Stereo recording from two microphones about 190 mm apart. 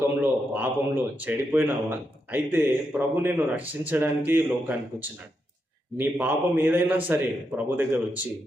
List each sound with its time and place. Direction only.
0.2 s speech: 10° right (ahead or behind)